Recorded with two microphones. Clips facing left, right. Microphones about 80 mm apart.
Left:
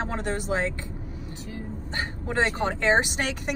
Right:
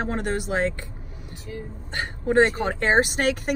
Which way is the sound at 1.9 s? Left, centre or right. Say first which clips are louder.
Right 7 dB; right.